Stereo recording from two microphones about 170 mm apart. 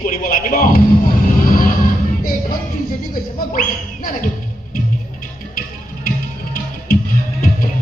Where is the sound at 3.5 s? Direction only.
55° left (ahead or behind).